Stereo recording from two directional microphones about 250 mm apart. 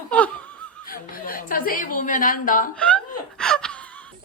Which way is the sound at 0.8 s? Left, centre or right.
Left.